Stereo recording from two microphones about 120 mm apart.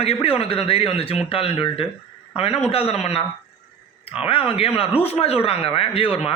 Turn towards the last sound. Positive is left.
turn(degrees=55)  # may be behind; listen again after turning